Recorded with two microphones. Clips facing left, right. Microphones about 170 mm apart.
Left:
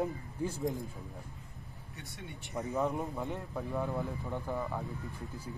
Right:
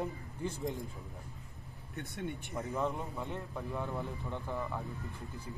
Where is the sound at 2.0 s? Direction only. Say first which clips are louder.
Right 8 dB; 50° right (ahead or behind).